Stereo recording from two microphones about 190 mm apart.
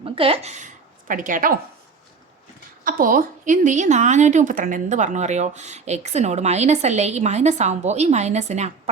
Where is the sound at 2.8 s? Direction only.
45° right (ahead or behind).